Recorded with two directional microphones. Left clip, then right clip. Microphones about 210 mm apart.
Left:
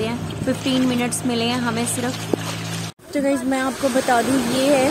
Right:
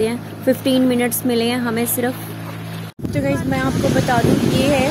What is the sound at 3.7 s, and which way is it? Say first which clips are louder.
Speech: right 2 dB; 40° left (ahead or behind).